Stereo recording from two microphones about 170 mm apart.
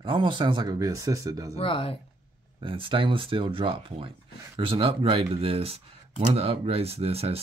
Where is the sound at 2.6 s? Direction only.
30° right (ahead or behind).